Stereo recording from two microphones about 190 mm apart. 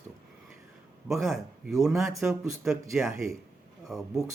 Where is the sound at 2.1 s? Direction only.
15° right (ahead or behind).